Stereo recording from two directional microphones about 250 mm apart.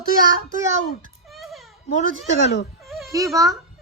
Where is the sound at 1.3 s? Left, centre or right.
Centre.